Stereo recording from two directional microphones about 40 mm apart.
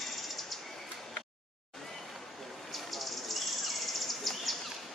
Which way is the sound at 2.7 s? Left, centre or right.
Centre.